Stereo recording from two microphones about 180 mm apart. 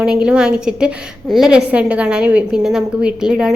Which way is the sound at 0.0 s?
5° right (ahead or behind).